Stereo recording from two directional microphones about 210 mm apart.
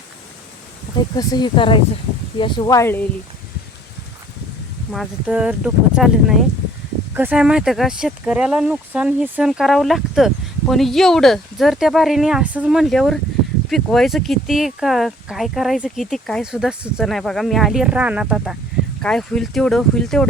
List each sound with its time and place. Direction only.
1.1 s speech: 20° left (ahead or behind)
4.9 s speech: 5° right (ahead or behind)